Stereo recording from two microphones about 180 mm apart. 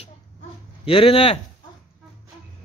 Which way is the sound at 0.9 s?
30° left (ahead or behind).